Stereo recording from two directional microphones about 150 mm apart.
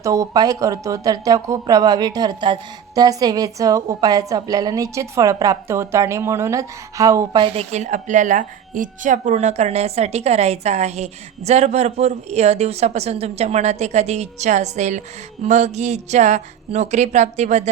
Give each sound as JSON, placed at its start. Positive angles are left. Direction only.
{"t": 0.0, "sound": "speech", "side_deg": -20}
{"t": 7.4, "sound": "speech", "side_deg": -40}